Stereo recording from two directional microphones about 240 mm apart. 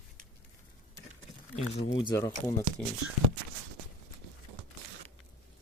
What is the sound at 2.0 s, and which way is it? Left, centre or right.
Speech, centre.